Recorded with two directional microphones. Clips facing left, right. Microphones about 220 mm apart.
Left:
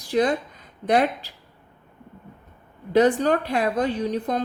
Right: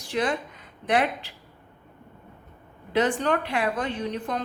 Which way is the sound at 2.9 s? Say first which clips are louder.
Left 5 dB; 40° left (ahead or behind).